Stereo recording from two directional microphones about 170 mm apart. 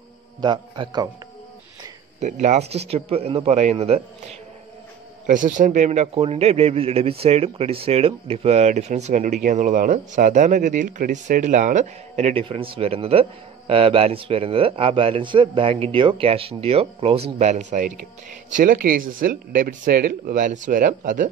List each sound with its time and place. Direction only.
0.4 s a man's voice: 25° right (ahead or behind)
2.1 s a man's voice: 45° right (ahead or behind)
5.2 s a man's voice: 50° right (ahead or behind)